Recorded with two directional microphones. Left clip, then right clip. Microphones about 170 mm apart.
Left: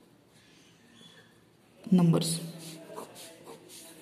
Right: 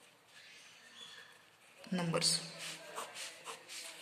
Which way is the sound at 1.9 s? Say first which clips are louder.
Left 8 dB; 10° left (ahead or behind).